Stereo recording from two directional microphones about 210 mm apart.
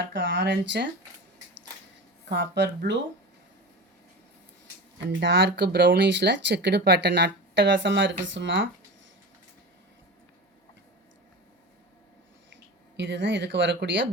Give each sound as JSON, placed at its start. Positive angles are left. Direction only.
{"t": 0.0, "sound": "speech", "side_deg": -60}
{"t": 2.3, "sound": "speech", "side_deg": -60}
{"t": 5.2, "sound": "speech", "side_deg": -55}
{"t": 13.0, "sound": "speech", "side_deg": -60}